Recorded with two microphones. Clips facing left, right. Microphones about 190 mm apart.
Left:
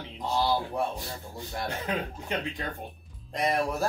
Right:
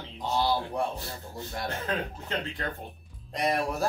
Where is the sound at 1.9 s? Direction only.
15° left (ahead or behind).